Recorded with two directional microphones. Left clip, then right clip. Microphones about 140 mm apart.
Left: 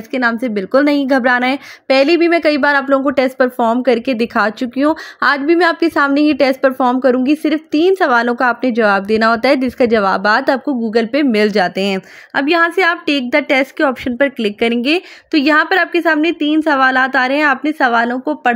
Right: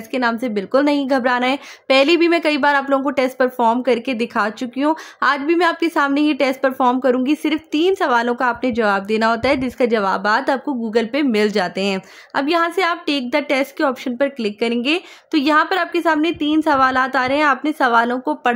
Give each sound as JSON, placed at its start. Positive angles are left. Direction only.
{"t": 0.1, "sound": "a woman's voice", "side_deg": 10}
{"t": 1.9, "sound": "a woman's voice", "side_deg": 0}
{"t": 12.4, "sound": "a woman's voice", "side_deg": 10}